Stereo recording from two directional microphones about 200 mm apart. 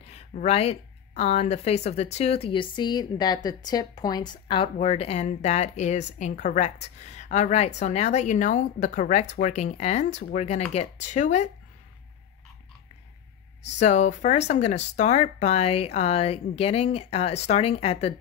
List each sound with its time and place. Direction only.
0.0 s speech: 35° left (ahead or behind)
13.7 s speech: 35° left (ahead or behind)